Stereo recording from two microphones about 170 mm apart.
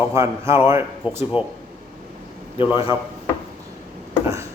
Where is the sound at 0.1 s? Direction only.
15° right (ahead or behind).